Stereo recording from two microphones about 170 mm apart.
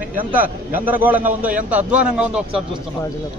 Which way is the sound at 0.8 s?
10° right (ahead or behind).